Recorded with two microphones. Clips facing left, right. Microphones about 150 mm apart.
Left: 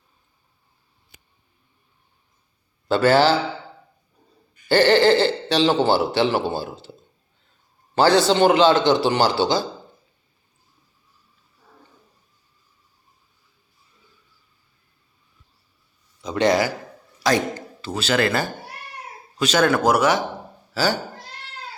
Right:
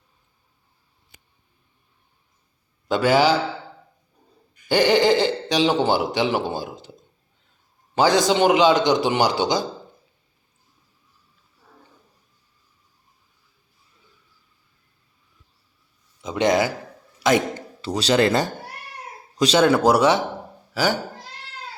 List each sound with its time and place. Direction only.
2.9 s a man's voice: 10° right (ahead or behind)
4.7 s a man's voice: 15° right (ahead or behind)
7.9 s a man's voice: 10° right (ahead or behind)
16.2 s a man's voice: 20° right (ahead or behind)